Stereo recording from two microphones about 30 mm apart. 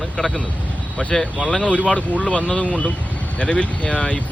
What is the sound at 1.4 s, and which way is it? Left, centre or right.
Speech, left.